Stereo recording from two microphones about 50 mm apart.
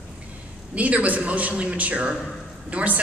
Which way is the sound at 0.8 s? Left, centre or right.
Right.